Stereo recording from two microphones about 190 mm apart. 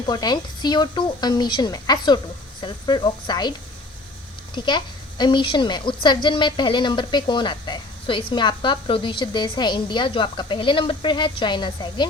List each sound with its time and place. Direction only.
0.0 s a woman's voice: 20° left (ahead or behind)
4.5 s a woman's voice: 25° left (ahead or behind)